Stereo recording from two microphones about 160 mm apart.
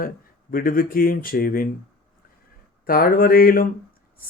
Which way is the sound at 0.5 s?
65° left (ahead or behind).